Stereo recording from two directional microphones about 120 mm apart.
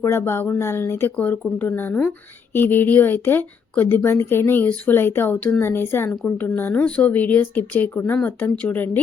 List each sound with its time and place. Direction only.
0.0 s speech: 20° left (ahead or behind)